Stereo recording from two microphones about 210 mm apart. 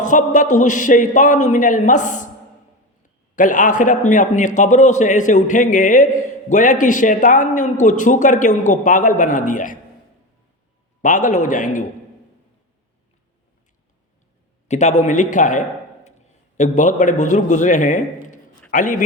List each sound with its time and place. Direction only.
0.0 s a man's voice: 35° left (ahead or behind)
3.3 s a man's voice: 40° left (ahead or behind)
11.0 s a man's voice: 35° left (ahead or behind)
14.7 s a man's voice: 35° left (ahead or behind)